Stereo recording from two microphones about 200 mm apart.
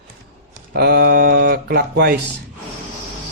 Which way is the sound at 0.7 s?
50° right (ahead or behind).